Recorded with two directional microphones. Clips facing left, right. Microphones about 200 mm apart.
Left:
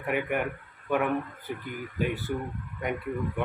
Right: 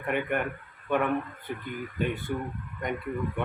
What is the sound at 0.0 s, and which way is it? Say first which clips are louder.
A man's voice: even; 5° left (ahead or behind).